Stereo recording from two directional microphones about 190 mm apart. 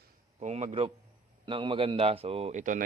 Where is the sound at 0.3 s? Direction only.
35° right (ahead or behind).